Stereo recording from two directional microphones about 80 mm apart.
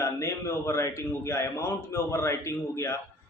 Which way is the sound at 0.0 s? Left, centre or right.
Left.